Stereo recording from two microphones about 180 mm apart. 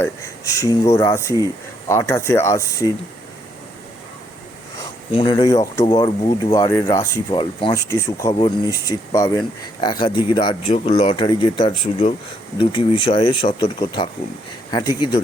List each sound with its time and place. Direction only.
0.0 s speech: 15° left (ahead or behind)
5.1 s speech: 25° left (ahead or behind)
8.4 s speech: 30° left (ahead or behind)